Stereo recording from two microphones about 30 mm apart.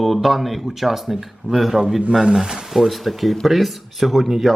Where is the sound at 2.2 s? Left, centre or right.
Right.